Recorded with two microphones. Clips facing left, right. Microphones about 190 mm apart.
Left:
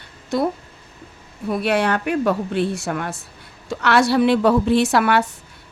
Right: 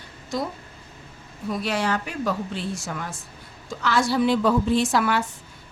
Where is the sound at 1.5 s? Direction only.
60° left (ahead or behind).